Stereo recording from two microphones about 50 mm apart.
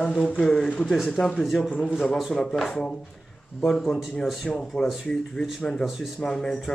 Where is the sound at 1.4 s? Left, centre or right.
Centre.